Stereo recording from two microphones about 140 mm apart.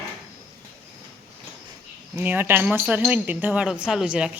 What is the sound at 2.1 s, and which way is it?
A woman's voice, 15° right (ahead or behind).